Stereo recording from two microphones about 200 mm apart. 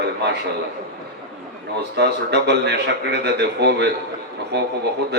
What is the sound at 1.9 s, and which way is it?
Speech, 55° right (ahead or behind).